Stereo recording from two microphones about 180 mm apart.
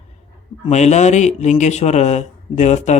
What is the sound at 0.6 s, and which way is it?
A child's voice, 40° left (ahead or behind).